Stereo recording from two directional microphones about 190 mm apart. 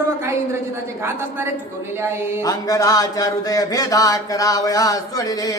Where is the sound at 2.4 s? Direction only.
20° left (ahead or behind).